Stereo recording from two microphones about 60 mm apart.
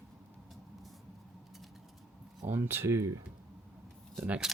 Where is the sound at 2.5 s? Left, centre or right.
Right.